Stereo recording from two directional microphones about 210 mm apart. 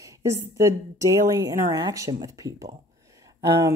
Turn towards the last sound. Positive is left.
turn(degrees=-15)  # may be behind; listen again after turning